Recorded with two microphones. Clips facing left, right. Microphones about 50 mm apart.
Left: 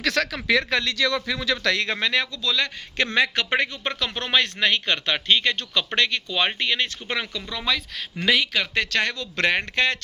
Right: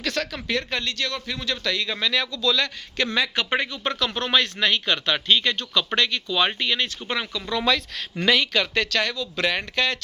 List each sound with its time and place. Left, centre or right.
0.0 s speech: left
1.4 s a man's voice: left
2.0 s speech: left
3.3 s speech: left
3.8 s speech: left
6.8 s speech: left
7.5 s speech: centre; by 9.1 s left
9.1 s speech: left
9.5 s speech: left